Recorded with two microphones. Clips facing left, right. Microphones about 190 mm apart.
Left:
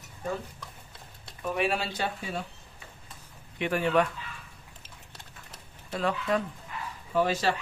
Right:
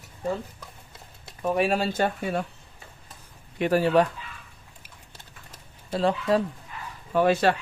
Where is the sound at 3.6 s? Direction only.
35° right (ahead or behind).